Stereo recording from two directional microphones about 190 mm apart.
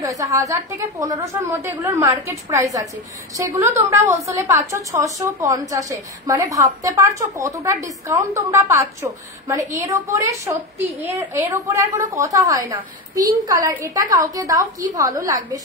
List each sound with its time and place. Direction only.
0.0 s a woman's voice: 15° right (ahead or behind)